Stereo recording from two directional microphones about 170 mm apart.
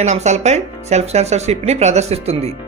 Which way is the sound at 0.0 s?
40° right (ahead or behind).